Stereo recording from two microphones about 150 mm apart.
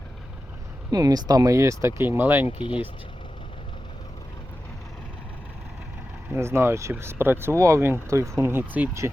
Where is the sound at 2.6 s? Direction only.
35° left (ahead or behind).